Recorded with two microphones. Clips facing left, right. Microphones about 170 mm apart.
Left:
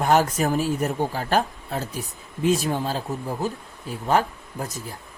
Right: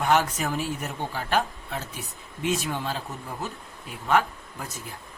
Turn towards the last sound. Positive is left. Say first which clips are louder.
# left 6 dB
turn(degrees=40)  # may be behind; listen again after turning